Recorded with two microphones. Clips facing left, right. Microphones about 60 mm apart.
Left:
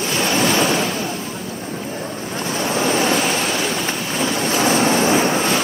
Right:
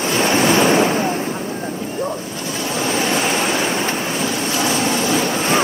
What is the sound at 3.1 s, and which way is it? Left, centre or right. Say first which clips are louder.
Waves: right 1 dB; centre.